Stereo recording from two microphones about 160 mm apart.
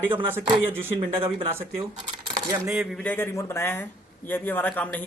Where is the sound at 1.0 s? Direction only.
35° right (ahead or behind).